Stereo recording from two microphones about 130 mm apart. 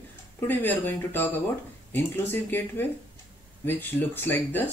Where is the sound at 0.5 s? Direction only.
15° left (ahead or behind).